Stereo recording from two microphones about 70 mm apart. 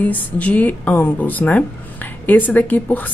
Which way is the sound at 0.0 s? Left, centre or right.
Left.